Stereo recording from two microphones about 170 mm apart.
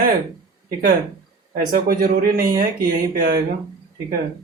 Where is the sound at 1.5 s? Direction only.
55° right (ahead or behind).